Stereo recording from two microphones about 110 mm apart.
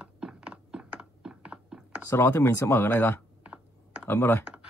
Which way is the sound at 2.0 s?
25° left (ahead or behind).